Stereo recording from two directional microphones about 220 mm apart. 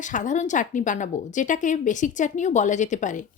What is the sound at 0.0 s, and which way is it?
Speech, 35° left (ahead or behind).